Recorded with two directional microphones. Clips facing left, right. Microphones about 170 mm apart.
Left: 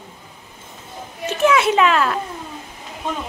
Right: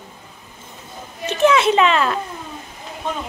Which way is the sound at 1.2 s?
10° left (ahead or behind).